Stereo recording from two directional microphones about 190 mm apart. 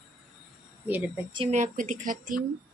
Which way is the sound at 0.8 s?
10° right (ahead or behind).